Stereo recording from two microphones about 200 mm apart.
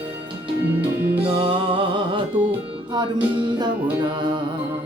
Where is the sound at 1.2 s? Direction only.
25° right (ahead or behind).